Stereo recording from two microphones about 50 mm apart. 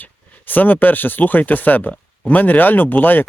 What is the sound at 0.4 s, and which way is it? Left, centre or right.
Speech, left.